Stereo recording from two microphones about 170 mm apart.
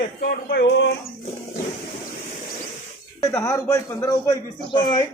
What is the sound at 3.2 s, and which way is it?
A man's voice, 20° left (ahead or behind).